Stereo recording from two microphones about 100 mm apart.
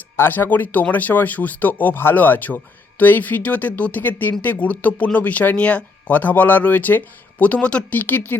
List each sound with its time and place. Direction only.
0.2 s speech: 20° left (ahead or behind)